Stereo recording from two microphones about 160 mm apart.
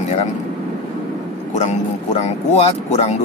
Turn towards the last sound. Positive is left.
turn(degrees=40)  # may be behind; listen again after turning